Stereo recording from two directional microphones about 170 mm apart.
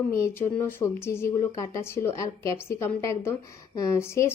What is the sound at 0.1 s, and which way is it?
A woman's voice, 15° left (ahead or behind).